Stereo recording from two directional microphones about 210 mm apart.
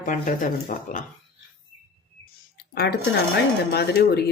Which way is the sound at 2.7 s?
50° left (ahead or behind).